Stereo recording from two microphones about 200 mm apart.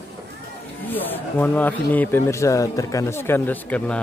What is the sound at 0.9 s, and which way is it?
Speech, 10° left (ahead or behind).